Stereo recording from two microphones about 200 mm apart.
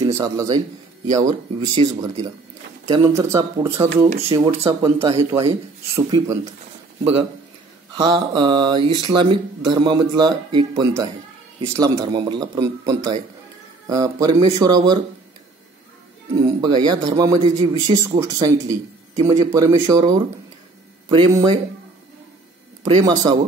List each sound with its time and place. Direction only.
0.0 s a man's voice: 20° right (ahead or behind)
7.9 s speech: 20° right (ahead or behind)
16.3 s speech: 20° right (ahead or behind)
21.3 s speech: 15° right (ahead or behind)
23.0 s speech: 20° right (ahead or behind)